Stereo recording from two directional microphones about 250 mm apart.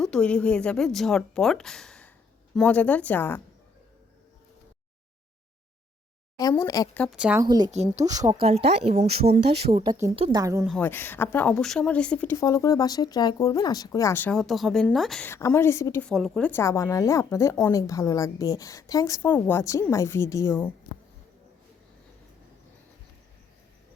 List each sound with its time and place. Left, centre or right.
0.0 s a woman's voice: centre
6.3 s speech: centre
7.4 s speech: centre
7.7 s speech: right
8.0 s speech: centre
8.4 s speech: right
10.7 s speech: centre